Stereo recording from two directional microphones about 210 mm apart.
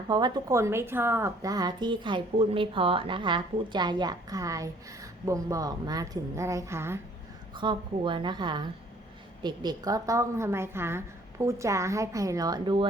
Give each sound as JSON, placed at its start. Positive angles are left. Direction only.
{"t": 0.1, "sound": "a woman's voice", "side_deg": -20}
{"t": 7.5, "sound": "a woman's voice", "side_deg": -20}